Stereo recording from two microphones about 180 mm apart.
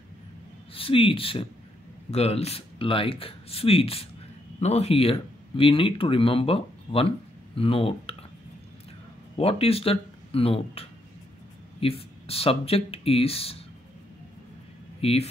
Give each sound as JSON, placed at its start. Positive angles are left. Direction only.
{"t": 0.7, "sound": "speech", "side_deg": 30}
{"t": 9.4, "sound": "speech", "side_deg": 30}
{"t": 15.0, "sound": "speech", "side_deg": 35}